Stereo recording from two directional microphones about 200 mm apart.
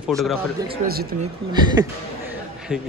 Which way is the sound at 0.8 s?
50° right (ahead or behind).